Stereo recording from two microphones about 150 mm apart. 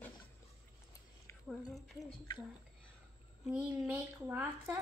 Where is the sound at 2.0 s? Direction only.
25° left (ahead or behind).